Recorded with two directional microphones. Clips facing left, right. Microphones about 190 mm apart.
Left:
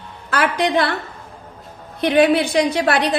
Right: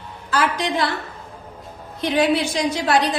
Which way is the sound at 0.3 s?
65° left (ahead or behind).